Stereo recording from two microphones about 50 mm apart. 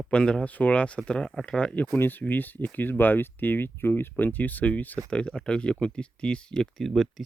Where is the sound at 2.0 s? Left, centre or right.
Left.